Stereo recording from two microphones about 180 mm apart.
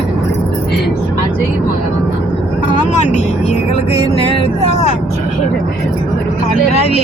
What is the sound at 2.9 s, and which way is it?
Vehicle, 40° left (ahead or behind).